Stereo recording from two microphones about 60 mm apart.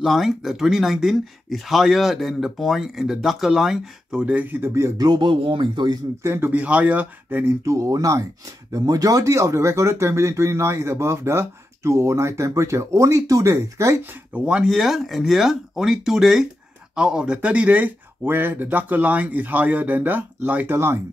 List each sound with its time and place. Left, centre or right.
0.0 s speech: centre; by 4.6 s right
4.7 s speech: right
6.2 s speech: right
6.5 s speech: right
7.6 s speech: right
14.3 s speech: centre
14.7 s speech: centre; by 20.7 s right
20.7 s speech: right